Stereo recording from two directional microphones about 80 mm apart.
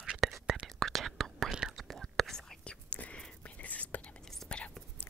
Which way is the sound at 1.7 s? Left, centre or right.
Centre.